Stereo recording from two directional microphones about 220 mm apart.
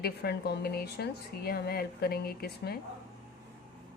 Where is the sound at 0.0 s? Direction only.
45° left (ahead or behind).